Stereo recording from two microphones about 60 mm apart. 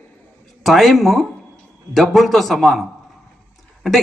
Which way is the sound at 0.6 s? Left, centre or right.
Centre.